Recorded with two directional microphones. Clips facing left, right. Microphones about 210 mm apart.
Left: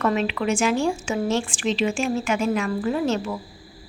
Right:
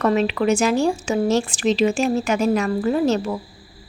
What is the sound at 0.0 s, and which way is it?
A woman's voice, 40° right (ahead or behind).